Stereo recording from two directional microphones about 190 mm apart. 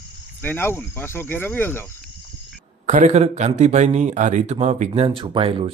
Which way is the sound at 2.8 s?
40° right (ahead or behind).